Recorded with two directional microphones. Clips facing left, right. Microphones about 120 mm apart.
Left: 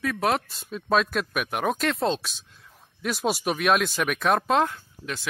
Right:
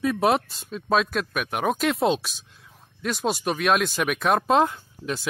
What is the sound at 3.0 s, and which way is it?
Speech, 5° left (ahead or behind).